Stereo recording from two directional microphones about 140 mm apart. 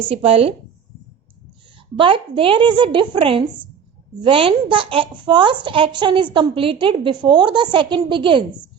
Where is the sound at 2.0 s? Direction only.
40° right (ahead or behind).